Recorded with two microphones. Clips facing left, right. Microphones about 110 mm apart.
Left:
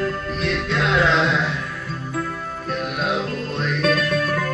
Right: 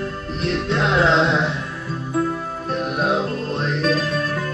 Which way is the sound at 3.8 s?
60° left (ahead or behind).